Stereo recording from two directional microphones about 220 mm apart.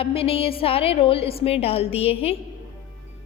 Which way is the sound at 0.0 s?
25° left (ahead or behind).